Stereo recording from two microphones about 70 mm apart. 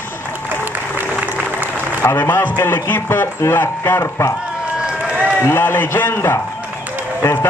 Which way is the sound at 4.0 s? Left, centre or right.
Left.